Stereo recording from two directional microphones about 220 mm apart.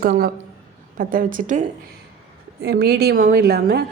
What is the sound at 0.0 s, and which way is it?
Speech, 40° right (ahead or behind).